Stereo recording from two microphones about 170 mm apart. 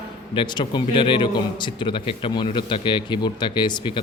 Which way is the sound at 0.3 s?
25° left (ahead or behind).